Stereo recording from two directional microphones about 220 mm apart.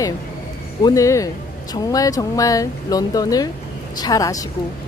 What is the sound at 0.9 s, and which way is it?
Speech, 15° left (ahead or behind).